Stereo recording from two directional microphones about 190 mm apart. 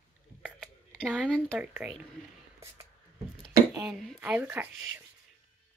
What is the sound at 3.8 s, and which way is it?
Speech, centre (ahead or behind).